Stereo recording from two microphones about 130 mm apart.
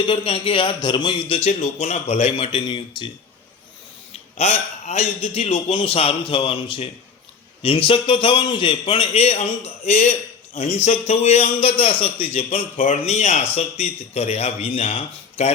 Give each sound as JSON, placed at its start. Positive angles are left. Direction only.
{"t": 0.0, "sound": "a man's voice", "side_deg": 40}
{"t": 1.5, "sound": "a man's voice", "side_deg": 55}
{"t": 4.1, "sound": "a man's voice", "side_deg": 55}
{"t": 10.5, "sound": "speech", "side_deg": 75}
{"t": 11.0, "sound": "a man's voice", "side_deg": 55}
{"t": 12.8, "sound": "a man's voice", "side_deg": 65}